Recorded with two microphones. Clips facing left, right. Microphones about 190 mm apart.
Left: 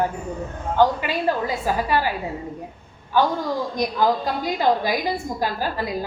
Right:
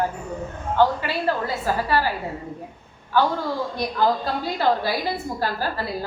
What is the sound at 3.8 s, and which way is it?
A woman's voice, 15° left (ahead or behind).